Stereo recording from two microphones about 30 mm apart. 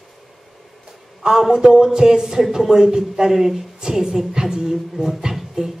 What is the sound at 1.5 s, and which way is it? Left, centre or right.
A man's voice, right.